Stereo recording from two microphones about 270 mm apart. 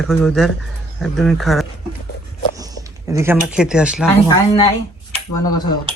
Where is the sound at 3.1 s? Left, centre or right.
Centre.